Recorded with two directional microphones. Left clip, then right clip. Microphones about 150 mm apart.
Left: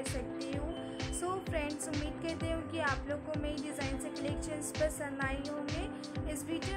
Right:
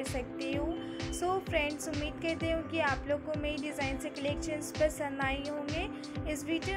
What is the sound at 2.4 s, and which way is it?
Speech, 5° right (ahead or behind).